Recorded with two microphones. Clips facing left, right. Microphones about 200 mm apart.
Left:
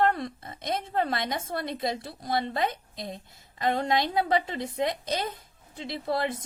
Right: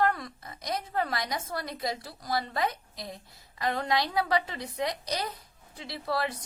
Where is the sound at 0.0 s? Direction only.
25° left (ahead or behind).